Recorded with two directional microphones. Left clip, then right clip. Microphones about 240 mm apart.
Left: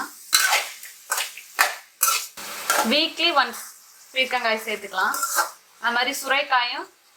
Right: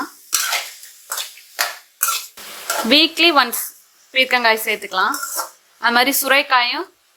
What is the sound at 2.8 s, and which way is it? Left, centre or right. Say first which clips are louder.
Speech: right 13 dB; right.